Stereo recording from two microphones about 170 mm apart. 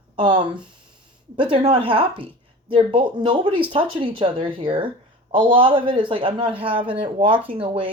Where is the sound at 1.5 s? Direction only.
30° right (ahead or behind).